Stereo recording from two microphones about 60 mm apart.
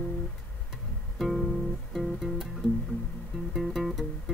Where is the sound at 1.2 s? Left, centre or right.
Centre.